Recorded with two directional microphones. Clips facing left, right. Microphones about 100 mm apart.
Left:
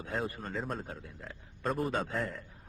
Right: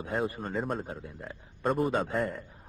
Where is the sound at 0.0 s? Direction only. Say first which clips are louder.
Right 5 dB; 5° right (ahead or behind).